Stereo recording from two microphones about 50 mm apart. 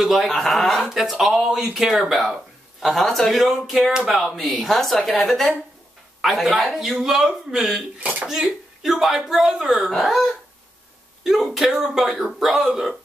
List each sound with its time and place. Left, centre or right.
0.0 s speech: centre
4.4 s speech: centre
8.0 s speech: right
8.3 s speech: centre